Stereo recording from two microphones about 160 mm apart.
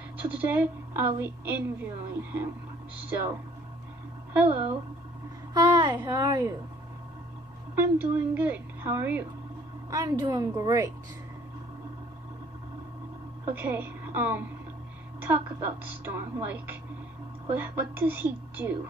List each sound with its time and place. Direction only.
0.4 s a woman's voice: 10° right (ahead or behind)
4.3 s a woman's voice: 10° right (ahead or behind)
5.5 s a sound: 25° right (ahead or behind)
6.0 s a woman's voice: 25° right (ahead or behind)
7.7 s a woman's voice: 15° right (ahead or behind)
13.5 s a woman's voice: 15° right (ahead or behind)